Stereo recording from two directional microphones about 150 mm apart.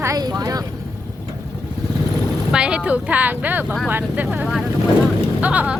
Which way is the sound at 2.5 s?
5° right (ahead or behind).